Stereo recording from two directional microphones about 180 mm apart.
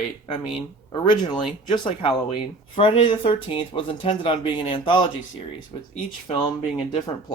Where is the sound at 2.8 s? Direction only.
30° left (ahead or behind).